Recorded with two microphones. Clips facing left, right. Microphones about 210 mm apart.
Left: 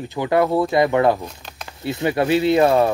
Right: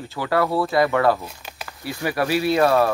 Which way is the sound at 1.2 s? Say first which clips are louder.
Left 2 dB; 5° right (ahead or behind).